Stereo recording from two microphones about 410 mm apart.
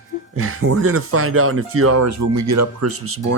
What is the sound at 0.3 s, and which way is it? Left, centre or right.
Speech, right.